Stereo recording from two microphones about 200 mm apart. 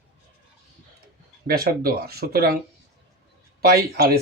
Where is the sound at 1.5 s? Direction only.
50° right (ahead or behind).